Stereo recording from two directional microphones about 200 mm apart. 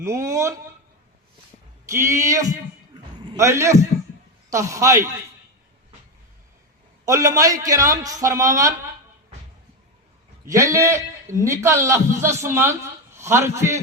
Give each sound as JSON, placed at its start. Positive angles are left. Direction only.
{"t": 0.0, "sound": "a man's voice", "side_deg": -15}
{"t": 1.9, "sound": "a man's voice", "side_deg": -15}
{"t": 7.0, "sound": "a man's voice", "side_deg": -15}
{"t": 10.4, "sound": "a man's voice", "side_deg": -15}